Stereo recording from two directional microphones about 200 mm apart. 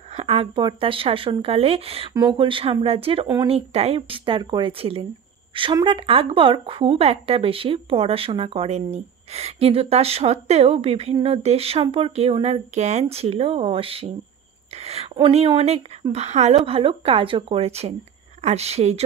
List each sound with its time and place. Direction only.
0.1 s speech: 30° right (ahead or behind)